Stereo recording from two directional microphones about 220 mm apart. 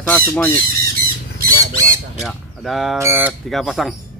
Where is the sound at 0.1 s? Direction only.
5° left (ahead or behind).